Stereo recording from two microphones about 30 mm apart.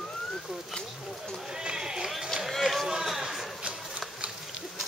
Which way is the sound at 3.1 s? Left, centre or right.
Centre.